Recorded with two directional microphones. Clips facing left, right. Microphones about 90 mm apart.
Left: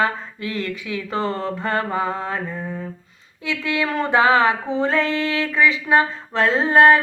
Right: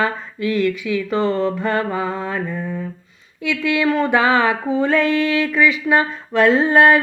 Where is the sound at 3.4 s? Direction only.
30° left (ahead or behind).